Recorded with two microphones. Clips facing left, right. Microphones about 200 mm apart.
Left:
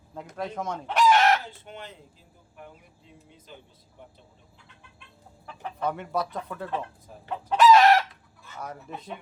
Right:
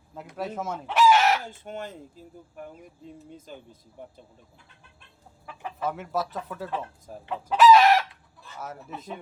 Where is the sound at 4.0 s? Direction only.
45° right (ahead or behind).